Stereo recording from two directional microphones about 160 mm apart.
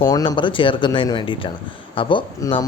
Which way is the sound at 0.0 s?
25° left (ahead or behind).